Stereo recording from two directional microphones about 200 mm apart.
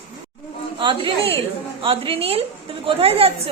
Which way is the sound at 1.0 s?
30° right (ahead or behind).